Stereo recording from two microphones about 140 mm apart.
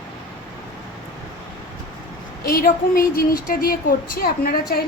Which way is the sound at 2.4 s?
90° left.